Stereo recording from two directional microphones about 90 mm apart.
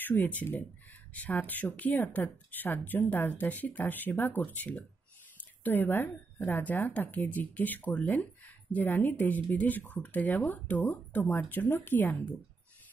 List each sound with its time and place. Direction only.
0.0 s speech: 20° left (ahead or behind)
5.4 s a sound: 20° left (ahead or behind)
6.4 s speech: 20° left (ahead or behind)